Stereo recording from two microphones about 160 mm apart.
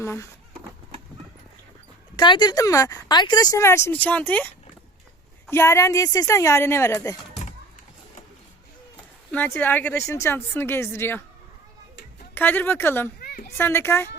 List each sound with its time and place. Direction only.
0.0 s speech: 15° left (ahead or behind)
2.1 s speech: 30° left (ahead or behind)
9.3 s speech: 10° left (ahead or behind)
12.3 s speech: 15° left (ahead or behind)
13.1 s a sound: 70° left (ahead or behind)
13.6 s speech: 15° left (ahead or behind)